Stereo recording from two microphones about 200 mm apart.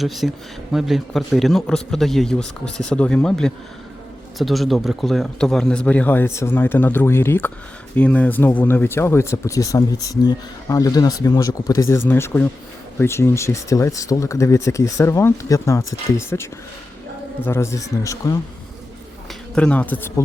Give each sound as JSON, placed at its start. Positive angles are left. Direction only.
{"t": 0.0, "sound": "a man's voice", "side_deg": 0}
{"t": 19.5, "sound": "speech", "side_deg": 5}